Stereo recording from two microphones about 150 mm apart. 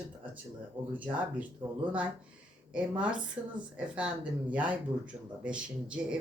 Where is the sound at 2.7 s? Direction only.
10° right (ahead or behind).